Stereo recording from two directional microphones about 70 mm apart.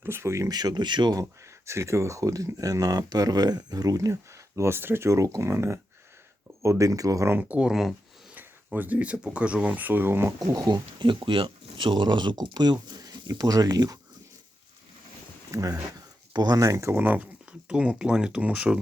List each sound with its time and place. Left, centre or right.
0.0 s speech: right
0.5 s speech: right
1.2 s speech: right
7.3 s speech: right
7.7 s speech: centre
8.4 s speech: right
10.4 s speech: right
15.5 s speech: right
16.6 s speech: right
16.9 s speech: right
17.7 s speech: centre